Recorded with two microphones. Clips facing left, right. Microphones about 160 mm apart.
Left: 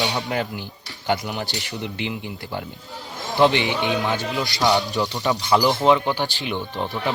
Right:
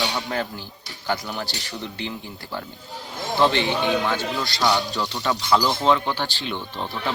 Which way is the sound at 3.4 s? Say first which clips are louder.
Left 2 dB; 15° left (ahead or behind).